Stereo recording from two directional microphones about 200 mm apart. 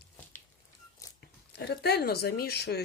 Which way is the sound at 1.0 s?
15° left (ahead or behind).